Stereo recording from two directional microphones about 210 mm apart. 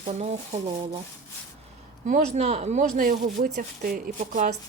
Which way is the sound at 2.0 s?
35° right (ahead or behind).